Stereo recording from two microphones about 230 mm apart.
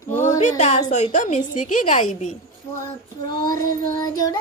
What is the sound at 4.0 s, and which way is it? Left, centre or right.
Child singing, centre.